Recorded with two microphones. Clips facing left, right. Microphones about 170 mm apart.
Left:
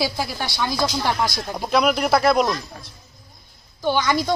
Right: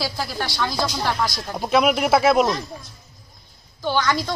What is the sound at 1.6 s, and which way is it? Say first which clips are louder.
Speech: right 1 dB; 5° right (ahead or behind).